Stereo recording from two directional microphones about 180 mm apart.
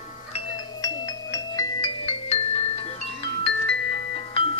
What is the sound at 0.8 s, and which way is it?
Music, 20° left (ahead or behind).